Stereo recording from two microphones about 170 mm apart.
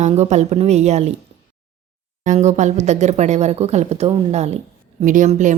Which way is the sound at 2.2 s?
45° right (ahead or behind).